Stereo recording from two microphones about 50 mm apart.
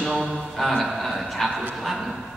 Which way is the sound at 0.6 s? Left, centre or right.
Centre.